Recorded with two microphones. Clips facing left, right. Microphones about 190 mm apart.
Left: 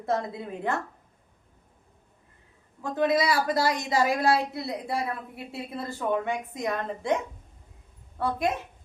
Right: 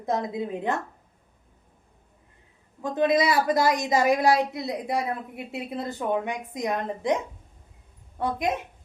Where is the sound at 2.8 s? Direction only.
20° right (ahead or behind).